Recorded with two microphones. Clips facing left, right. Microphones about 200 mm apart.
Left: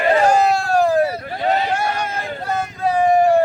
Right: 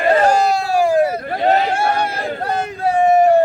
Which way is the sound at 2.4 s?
60° right (ahead or behind).